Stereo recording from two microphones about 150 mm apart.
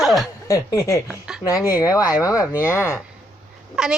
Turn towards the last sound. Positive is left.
turn(degrees=-5)  # may be behind; listen again after turning